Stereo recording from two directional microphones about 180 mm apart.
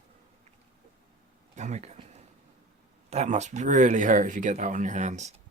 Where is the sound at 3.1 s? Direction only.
40° right (ahead or behind).